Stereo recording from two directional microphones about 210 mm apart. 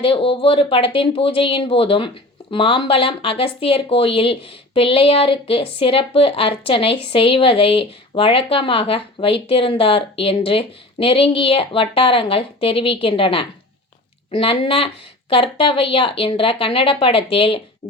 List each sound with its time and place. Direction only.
0.0 s speech: 25° left (ahead or behind)